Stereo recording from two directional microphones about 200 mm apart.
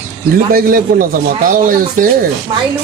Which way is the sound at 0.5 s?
45° right (ahead or behind).